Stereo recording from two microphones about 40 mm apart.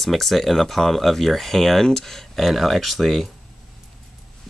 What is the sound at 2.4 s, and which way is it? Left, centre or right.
Speech, centre.